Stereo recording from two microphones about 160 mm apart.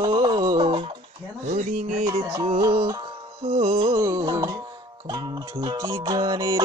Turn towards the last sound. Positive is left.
turn(degrees=-25)  # may be behind; listen again after turning